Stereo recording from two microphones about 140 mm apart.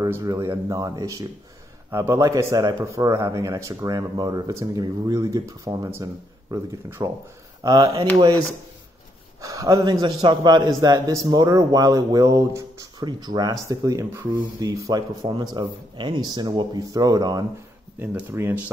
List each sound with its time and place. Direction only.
0.0 s a man's voice: 25° right (ahead or behind)
17.9 s speech: 15° right (ahead or behind)